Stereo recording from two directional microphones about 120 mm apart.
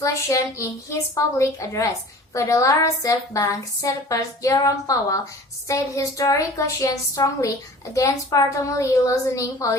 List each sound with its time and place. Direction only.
0.0 s speech: 30° left (ahead or behind)